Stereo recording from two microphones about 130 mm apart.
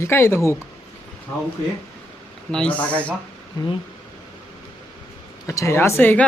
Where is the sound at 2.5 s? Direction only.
10° left (ahead or behind).